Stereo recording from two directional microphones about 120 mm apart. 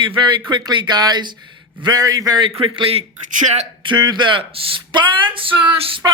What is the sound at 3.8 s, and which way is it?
Speech, 35° right (ahead or behind).